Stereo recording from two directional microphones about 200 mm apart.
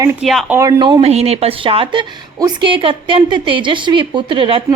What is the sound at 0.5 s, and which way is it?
A woman's voice, 20° right (ahead or behind).